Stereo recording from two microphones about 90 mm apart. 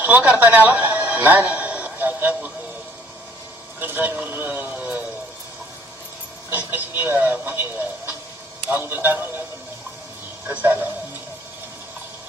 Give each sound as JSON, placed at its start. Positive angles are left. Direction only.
{"t": 0.0, "sound": "a sound", "side_deg": -20}
{"t": 3.8, "sound": "speech", "side_deg": -20}
{"t": 6.5, "sound": "speech", "side_deg": -20}
{"t": 10.4, "sound": "speech", "side_deg": -20}